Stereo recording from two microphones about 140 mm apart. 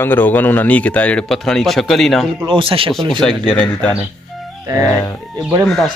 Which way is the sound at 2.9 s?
5° left (ahead or behind).